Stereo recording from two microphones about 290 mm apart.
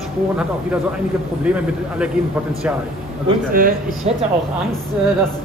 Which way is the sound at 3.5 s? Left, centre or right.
Right.